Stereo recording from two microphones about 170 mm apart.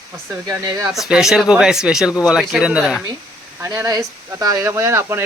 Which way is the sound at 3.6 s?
20° right (ahead or behind).